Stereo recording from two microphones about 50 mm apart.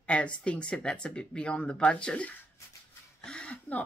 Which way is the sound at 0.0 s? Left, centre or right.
Left.